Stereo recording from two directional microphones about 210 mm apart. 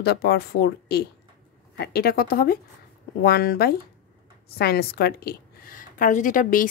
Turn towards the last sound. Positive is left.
turn(degrees=40)  # may be behind; listen again after turning